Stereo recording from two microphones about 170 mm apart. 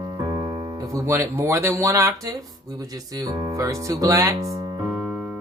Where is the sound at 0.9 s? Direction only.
15° right (ahead or behind).